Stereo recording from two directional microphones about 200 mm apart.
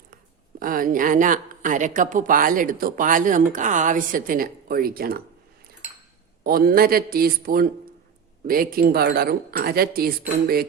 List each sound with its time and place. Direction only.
0.6 s speech: 45° right (ahead or behind)
6.4 s speech: 50° right (ahead or behind)